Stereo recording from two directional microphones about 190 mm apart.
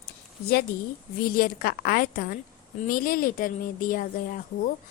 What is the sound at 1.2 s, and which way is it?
A woman's voice, 50° left (ahead or behind).